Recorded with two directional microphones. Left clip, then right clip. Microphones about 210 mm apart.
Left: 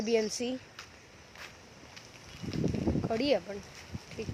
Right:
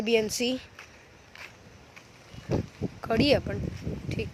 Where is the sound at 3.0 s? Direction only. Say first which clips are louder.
Right 7 dB; 25° right (ahead or behind).